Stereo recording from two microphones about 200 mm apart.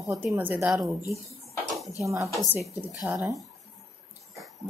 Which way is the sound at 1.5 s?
Centre (ahead or behind).